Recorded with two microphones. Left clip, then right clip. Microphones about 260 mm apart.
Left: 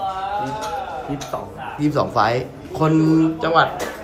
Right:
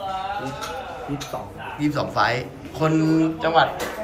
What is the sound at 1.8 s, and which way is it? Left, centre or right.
A man's voice, left.